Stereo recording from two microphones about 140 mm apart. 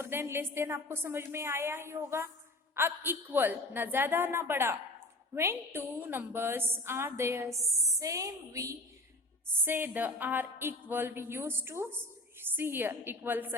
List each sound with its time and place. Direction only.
0.0 s a woman's voice: 20° right (ahead or behind)